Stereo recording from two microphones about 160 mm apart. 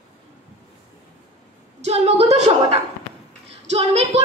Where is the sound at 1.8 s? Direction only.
40° right (ahead or behind).